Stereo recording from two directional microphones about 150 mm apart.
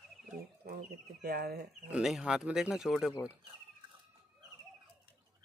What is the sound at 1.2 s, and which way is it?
Speech, 90° right.